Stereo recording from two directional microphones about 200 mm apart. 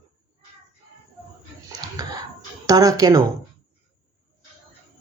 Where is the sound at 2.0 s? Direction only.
20° right (ahead or behind).